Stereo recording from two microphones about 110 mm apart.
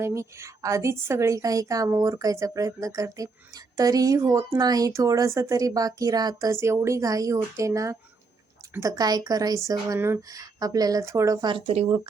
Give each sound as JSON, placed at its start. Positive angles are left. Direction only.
{"t": 0.0, "sound": "a woman's voice", "side_deg": -25}
{"t": 11.4, "sound": "speech", "side_deg": -50}